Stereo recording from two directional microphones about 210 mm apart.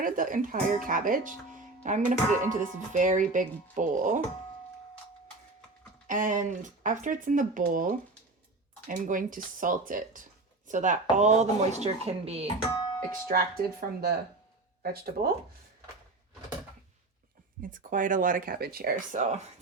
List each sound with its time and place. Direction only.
0.0 s speech: 40° right (ahead or behind)
6.1 s speech: 40° right (ahead or behind)
12.6 s music: 20° left (ahead or behind)
13.2 s speech: 45° right (ahead or behind)
17.6 s speech: 40° right (ahead or behind)